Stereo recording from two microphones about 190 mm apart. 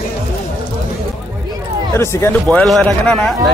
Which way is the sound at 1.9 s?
15° left (ahead or behind).